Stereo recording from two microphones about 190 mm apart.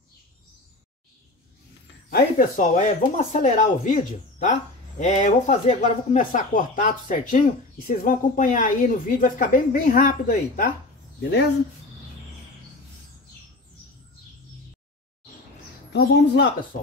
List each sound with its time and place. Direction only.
2.0 s speech: 50° left (ahead or behind)
11.1 s speech: 60° left (ahead or behind)
15.9 s speech: 65° left (ahead or behind)